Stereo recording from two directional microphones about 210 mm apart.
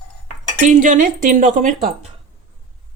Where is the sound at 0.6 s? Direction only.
40° right (ahead or behind).